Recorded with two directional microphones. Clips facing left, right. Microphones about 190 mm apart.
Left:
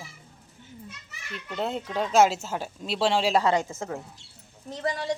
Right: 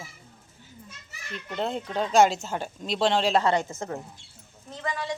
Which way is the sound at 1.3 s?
5° left (ahead or behind).